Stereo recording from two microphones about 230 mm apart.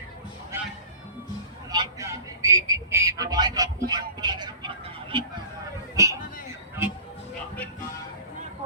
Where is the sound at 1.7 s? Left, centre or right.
Centre.